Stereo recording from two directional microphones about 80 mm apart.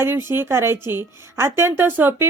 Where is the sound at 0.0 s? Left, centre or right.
Right.